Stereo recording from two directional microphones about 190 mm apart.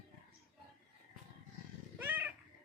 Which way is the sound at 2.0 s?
10° right (ahead or behind).